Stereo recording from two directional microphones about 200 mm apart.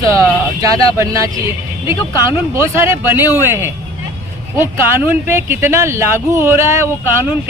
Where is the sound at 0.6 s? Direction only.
15° right (ahead or behind).